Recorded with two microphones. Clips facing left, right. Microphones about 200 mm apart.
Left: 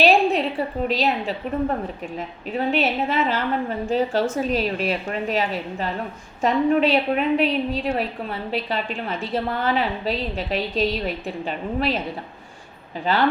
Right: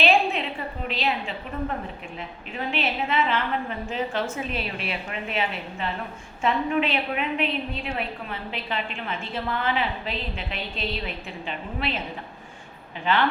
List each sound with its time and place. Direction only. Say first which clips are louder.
0.0 s a sound: left 5 dB; 40° left (ahead or behind)
0.9 s a woman's voice: left 3 dB; 40° left (ahead or behind)
13.1 s a woman's voice: left 2 dB; 35° left (ahead or behind)